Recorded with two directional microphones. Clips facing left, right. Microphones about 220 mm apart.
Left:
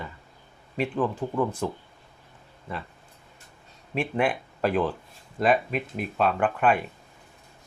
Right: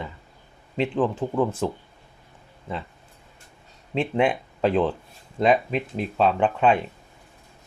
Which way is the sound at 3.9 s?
20° right (ahead or behind).